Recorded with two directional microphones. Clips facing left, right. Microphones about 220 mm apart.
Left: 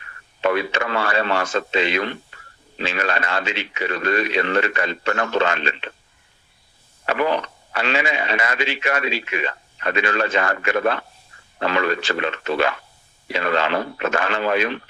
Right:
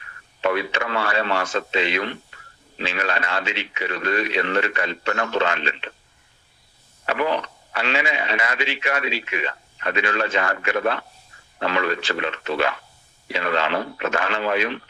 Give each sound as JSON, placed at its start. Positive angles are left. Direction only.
{"t": 0.4, "sound": "speech", "side_deg": 45}
{"t": 7.0, "sound": "speech", "side_deg": 45}